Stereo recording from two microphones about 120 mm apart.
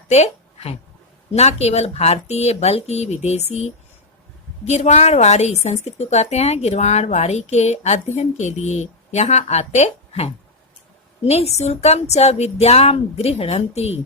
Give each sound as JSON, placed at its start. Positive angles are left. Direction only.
{"t": 0.1, "sound": "a woman's voice", "side_deg": 60}